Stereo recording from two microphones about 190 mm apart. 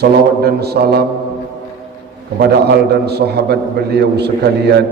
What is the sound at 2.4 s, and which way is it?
A man's voice, 60° right (ahead or behind).